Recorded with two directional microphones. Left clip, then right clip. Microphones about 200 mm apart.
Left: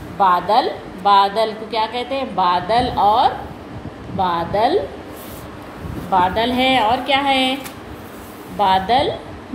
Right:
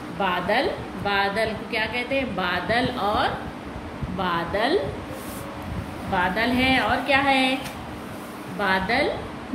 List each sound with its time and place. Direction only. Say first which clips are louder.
0.2 s a woman's voice: left 8 dB; 10° left (ahead or behind)
6.1 s a woman's voice: left 7 dB; 15° left (ahead or behind)
8.5 s a woman's voice: left 7 dB; 15° left (ahead or behind)